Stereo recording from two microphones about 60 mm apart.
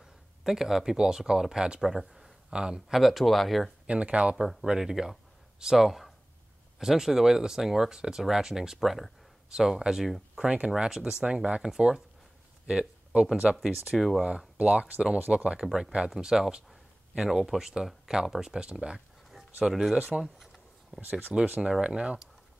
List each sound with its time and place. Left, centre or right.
0.4 s speech: centre
3.8 s speech: centre
4.6 s speech: centre
11.6 s speech: centre
12.6 s speech: centre
13.9 s speech: centre
14.6 s speech: centre
15.6 s speech: centre
20.0 s speech: centre
20.3 s a sound: centre
21.0 s speech: right